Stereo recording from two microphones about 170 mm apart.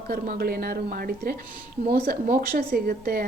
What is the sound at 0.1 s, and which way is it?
A woman's voice, 60° right (ahead or behind).